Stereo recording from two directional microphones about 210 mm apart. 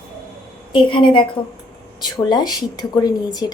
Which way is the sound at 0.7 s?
25° left (ahead or behind).